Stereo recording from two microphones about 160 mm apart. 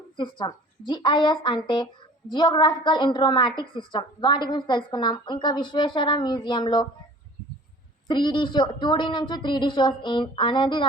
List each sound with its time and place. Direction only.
0.2 s a woman's voice: 30° left (ahead or behind)
8.0 s a woman's voice: 30° left (ahead or behind)